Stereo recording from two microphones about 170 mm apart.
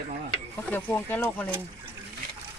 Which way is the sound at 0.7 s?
10° left (ahead or behind).